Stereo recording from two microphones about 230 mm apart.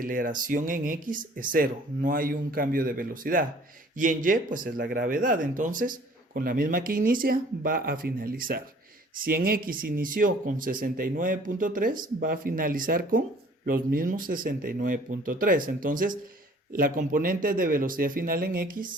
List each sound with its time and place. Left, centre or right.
0.0 s speech: right